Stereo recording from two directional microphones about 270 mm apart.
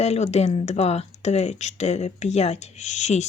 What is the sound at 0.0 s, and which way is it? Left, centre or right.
Speech, left.